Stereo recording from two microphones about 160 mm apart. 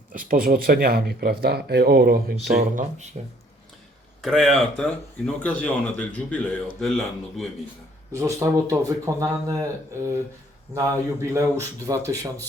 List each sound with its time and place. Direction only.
0.1 s speech: 60° right (ahead or behind); by 2.5 s 85° right
2.5 s speech: 50° right (ahead or behind)
4.2 s speech: centre (ahead or behind)
8.1 s speech: 20° right (ahead or behind)
10.8 s speech: 20° right (ahead or behind)